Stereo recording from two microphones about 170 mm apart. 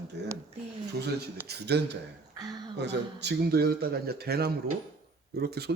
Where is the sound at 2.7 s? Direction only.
85° right.